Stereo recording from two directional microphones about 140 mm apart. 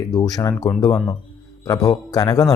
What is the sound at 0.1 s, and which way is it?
A man's voice, 25° left (ahead or behind).